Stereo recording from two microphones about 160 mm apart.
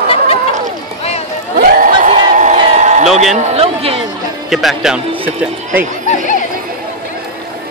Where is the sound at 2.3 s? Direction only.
45° right (ahead or behind).